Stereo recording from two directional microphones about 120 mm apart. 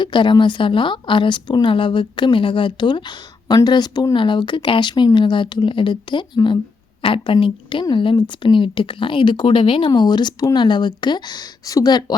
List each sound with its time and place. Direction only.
0.0 s a woman's voice: 40° left (ahead or behind)